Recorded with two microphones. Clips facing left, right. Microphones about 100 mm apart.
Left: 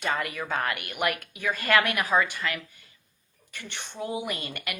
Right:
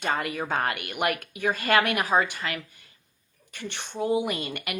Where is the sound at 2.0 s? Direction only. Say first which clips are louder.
Right 1 dB; 40° right (ahead or behind).